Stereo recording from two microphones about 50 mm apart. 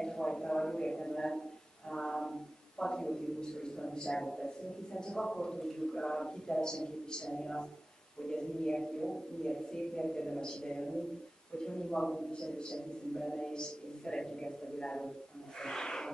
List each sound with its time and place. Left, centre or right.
0.0 s speech: centre
1.9 s a sound: centre
4.9 s a man's voice: centre